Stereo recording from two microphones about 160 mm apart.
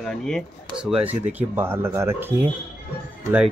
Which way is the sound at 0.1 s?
5° left (ahead or behind).